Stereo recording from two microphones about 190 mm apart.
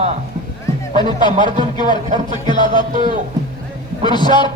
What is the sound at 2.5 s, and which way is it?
Speech, 25° left (ahead or behind).